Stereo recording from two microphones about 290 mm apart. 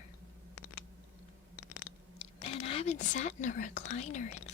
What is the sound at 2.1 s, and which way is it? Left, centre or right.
Speech, left.